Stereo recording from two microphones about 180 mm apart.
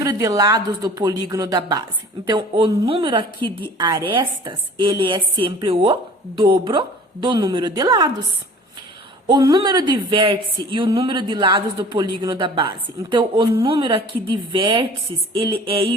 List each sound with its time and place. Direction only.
0.0 s a woman's voice: 20° right (ahead or behind)
9.2 s a woman's voice: 25° right (ahead or behind)